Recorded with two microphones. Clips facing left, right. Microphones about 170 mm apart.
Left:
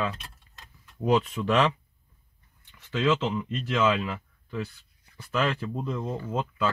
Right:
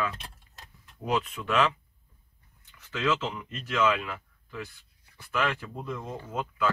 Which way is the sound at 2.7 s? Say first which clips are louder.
Left 4 dB; 30° left (ahead or behind).